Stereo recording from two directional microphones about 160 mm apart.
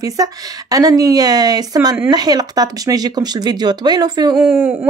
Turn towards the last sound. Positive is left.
turn(degrees=-10)  # may be behind; listen again after turning